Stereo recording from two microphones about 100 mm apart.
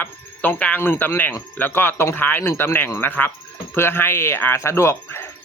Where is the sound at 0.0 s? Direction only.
15° left (ahead or behind).